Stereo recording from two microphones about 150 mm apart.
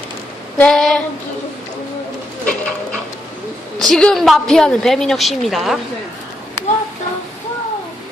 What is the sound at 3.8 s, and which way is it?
A woman's voice, 5° left (ahead or behind).